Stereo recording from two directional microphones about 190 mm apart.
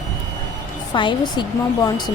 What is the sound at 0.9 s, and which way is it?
Speech, 25° left (ahead or behind).